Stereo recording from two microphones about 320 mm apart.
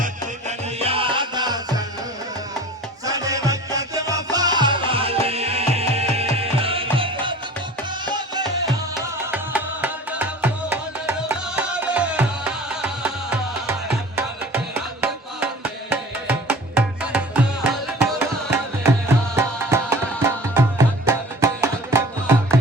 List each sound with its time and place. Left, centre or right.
0.0 s music: right
3.0 s music: centre
15.9 s music: centre
18.5 s music: centre